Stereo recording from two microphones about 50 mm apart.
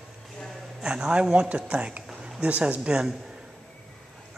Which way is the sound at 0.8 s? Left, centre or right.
Centre.